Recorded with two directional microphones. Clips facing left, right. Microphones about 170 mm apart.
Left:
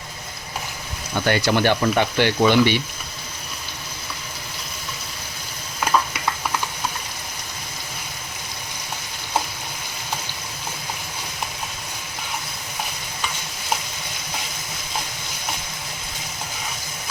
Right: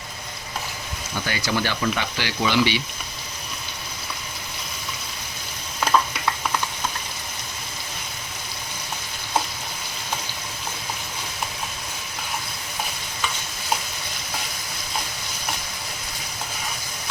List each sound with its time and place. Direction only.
1.2 s speech: 60° left (ahead or behind)